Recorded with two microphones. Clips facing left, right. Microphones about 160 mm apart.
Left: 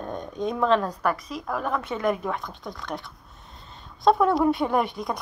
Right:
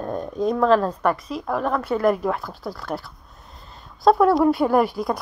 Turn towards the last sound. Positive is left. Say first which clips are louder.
# right 5 dB
turn(degrees=-5)  # may be behind; listen again after turning